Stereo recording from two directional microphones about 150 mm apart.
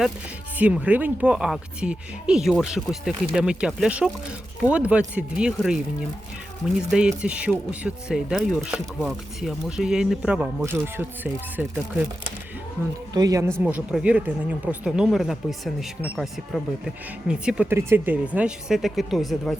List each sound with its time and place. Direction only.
0.5 s speech: 10° right (ahead or behind)
7.2 s speech: 10° right (ahead or behind)
13.1 s speech: 25° right (ahead or behind)
13.7 s speech: 10° right (ahead or behind)